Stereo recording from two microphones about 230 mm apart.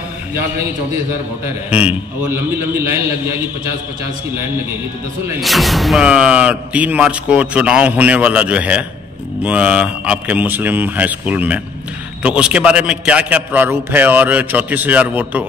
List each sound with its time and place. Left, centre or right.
1.7 s a man's voice: centre
5.3 s a man's voice: centre